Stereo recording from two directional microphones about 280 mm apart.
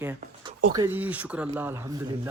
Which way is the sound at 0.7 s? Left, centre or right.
Centre.